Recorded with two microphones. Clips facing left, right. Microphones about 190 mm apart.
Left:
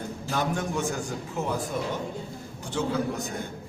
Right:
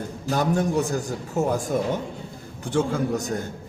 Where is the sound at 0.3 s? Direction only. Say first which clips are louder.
Right 6 dB; 40° right (ahead or behind).